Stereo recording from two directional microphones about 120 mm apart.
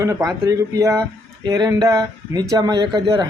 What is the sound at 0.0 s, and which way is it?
Speech, 25° right (ahead or behind).